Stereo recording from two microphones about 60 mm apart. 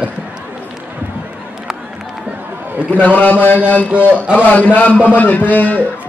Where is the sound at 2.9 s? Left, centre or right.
Left.